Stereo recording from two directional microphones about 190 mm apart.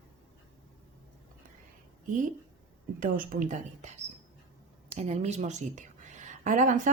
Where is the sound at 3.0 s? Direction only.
45° right (ahead or behind).